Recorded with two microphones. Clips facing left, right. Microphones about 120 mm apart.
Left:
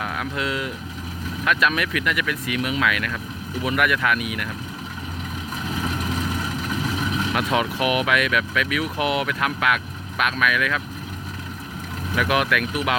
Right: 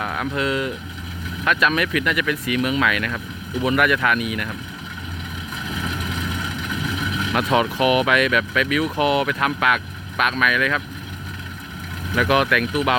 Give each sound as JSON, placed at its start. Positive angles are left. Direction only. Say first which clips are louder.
{"t": 0.0, "sound": "speech", "louder": "right 3 dB", "side_deg": 0}
{"t": 5.6, "sound": "vehicle", "louder": "left 2 dB", "side_deg": 40}
{"t": 7.3, "sound": "speech", "louder": "right 5 dB", "side_deg": 0}
{"t": 12.1, "sound": "speech", "louder": "right 3 dB", "side_deg": 5}